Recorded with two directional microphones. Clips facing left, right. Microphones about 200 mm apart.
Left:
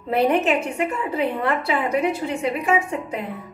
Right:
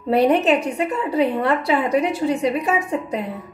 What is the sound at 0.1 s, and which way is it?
A woman's voice, 35° right (ahead or behind).